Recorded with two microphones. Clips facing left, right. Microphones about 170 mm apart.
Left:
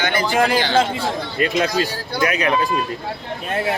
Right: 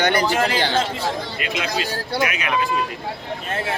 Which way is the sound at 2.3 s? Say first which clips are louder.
Left 4 dB; 35° left (ahead or behind).